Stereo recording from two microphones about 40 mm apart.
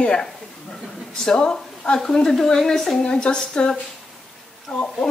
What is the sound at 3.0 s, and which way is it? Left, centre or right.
A woman's voice, left.